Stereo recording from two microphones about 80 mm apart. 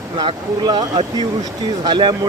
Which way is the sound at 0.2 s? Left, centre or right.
Right.